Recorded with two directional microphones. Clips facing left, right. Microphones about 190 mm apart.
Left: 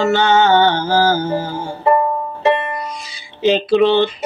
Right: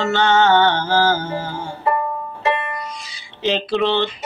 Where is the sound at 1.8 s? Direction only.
30° left (ahead or behind).